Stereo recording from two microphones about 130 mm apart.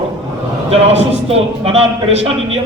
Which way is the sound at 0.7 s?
50° right (ahead or behind).